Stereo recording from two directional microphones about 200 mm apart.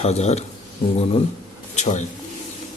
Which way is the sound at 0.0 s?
35° left (ahead or behind).